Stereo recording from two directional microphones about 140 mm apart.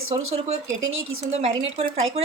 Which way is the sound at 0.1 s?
45° right (ahead or behind).